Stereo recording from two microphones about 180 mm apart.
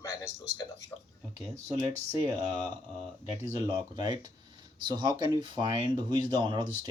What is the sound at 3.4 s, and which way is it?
Speech, 25° right (ahead or behind).